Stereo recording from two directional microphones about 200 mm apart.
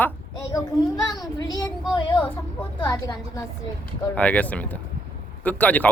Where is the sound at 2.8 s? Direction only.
20° left (ahead or behind).